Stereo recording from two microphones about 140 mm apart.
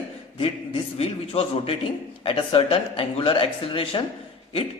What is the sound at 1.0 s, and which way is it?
Speech, 40° left (ahead or behind).